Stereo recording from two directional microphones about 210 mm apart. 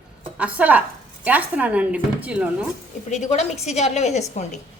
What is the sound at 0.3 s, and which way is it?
Speech, 5° right (ahead or behind).